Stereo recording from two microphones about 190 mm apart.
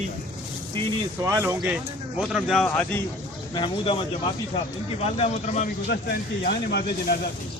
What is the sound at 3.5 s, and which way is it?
Speech, 25° left (ahead or behind).